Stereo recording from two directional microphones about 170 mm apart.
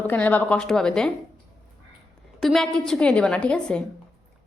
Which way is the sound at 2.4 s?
Centre (ahead or behind).